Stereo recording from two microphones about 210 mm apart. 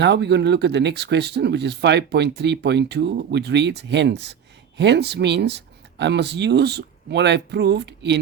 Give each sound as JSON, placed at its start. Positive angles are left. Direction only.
{"t": 0.0, "sound": "speech", "side_deg": -55}